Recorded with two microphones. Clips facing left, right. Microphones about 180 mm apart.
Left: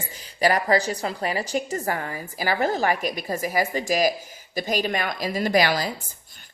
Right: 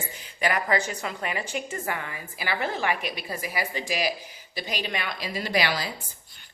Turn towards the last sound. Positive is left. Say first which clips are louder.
# left 1 dB
turn(degrees=45)  # may be behind; listen again after turning